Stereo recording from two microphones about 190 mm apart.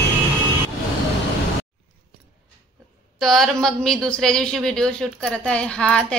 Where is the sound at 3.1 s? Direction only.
Centre (ahead or behind).